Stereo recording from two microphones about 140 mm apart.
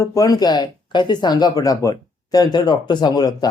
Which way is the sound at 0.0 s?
25° left (ahead or behind).